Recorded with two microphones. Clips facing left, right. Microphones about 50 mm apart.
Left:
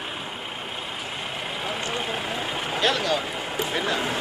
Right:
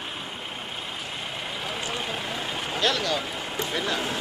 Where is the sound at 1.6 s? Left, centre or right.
Centre.